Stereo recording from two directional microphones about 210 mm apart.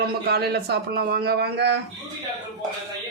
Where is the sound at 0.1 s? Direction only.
50° right (ahead or behind).